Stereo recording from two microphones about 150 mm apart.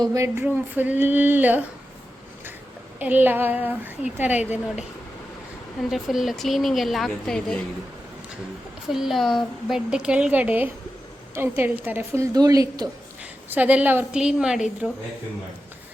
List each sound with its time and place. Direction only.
0.0 s a woman's voice: 20° right (ahead or behind)
3.0 s a woman's voice: 10° right (ahead or behind)
5.9 s speech: centre (ahead or behind)
8.9 s a woman's voice: centre (ahead or behind); by 12.9 s 25° right (ahead or behind)
13.5 s a woman's voice: 10° right (ahead or behind)